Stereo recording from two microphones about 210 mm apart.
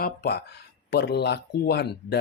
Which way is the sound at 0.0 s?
45° left (ahead or behind).